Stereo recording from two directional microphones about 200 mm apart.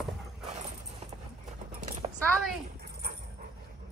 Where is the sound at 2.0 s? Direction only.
25° right (ahead or behind).